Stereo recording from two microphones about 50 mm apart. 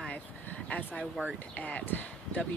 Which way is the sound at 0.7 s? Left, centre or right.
Left.